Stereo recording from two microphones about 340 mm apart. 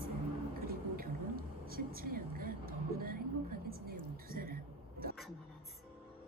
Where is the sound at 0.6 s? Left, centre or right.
Right.